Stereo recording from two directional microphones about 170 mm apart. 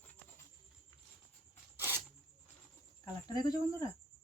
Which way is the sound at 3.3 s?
20° left (ahead or behind).